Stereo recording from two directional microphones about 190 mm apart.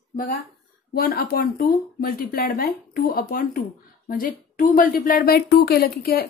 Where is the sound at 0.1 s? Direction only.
45° left (ahead or behind).